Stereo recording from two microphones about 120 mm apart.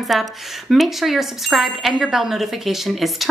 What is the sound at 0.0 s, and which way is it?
Speech, centre (ahead or behind).